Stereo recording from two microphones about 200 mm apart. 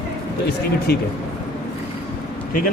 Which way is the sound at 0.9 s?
55° left (ahead or behind).